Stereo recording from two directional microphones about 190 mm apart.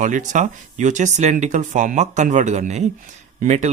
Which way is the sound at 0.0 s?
40° right (ahead or behind).